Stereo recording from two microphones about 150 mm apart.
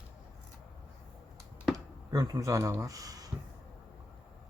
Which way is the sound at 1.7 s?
25° right (ahead or behind).